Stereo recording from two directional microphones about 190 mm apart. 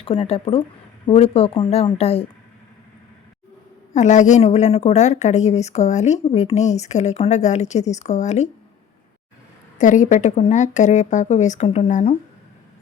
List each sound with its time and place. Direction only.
0.0 s a woman's voice: 35° left (ahead or behind)
3.9 s a woman's voice: 40° left (ahead or behind)
9.7 s a woman's voice: 40° left (ahead or behind)